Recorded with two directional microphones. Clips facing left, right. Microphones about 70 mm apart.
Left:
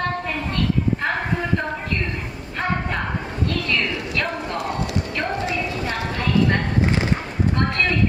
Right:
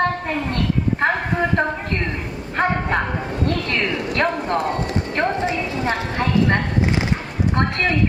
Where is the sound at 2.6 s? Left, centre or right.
Right.